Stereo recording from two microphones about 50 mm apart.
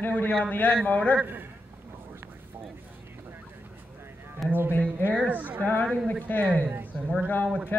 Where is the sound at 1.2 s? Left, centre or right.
Right.